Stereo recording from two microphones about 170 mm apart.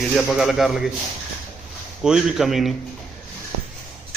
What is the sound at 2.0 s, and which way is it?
Speech, 5° right (ahead or behind).